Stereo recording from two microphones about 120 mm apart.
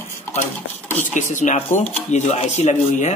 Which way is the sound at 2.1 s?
65° left (ahead or behind).